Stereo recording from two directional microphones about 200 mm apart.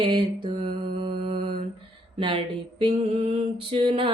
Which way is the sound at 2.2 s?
25° right (ahead or behind).